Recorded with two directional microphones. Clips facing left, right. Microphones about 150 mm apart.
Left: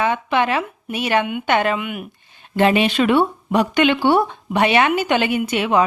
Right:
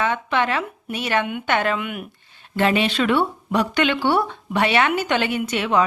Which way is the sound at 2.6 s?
15° left (ahead or behind).